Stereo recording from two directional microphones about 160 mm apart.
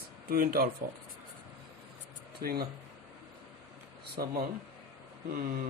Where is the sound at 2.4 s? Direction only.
70° right (ahead or behind).